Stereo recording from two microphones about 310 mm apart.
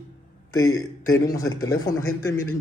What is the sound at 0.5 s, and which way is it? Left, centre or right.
Speech, left.